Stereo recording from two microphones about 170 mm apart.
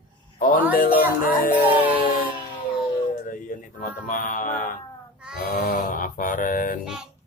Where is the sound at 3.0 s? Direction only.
55° left (ahead or behind).